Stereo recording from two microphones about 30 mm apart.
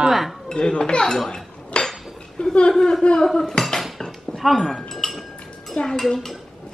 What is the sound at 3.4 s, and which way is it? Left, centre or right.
Cutlery, centre.